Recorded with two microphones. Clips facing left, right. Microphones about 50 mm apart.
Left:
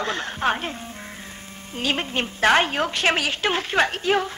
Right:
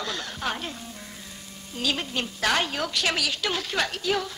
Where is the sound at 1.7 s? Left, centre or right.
Left.